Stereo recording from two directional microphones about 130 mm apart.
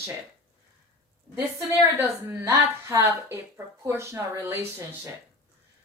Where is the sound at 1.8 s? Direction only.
20° right (ahead or behind).